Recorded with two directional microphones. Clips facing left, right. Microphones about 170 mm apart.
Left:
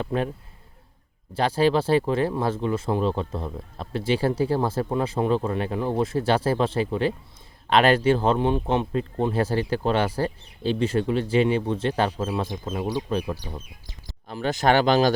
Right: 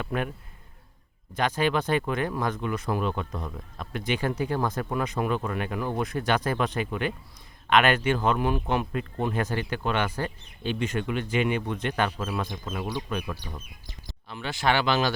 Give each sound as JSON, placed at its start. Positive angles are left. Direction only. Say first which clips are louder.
{"t": 0.0, "sound": "speech", "louder": "left 4 dB", "side_deg": 30}
{"t": 1.4, "sound": "speech", "louder": "left 5 dB", "side_deg": 30}